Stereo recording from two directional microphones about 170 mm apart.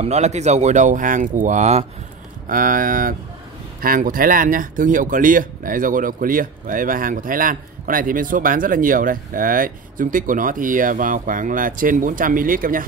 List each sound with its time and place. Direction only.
0.0 s speech: 40° right (ahead or behind)
2.4 s speech: 55° right (ahead or behind)